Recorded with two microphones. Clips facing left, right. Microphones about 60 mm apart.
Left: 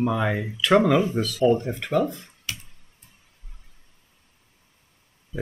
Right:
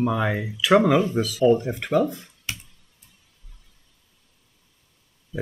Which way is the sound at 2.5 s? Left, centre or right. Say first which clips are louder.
Right 1 dB; right.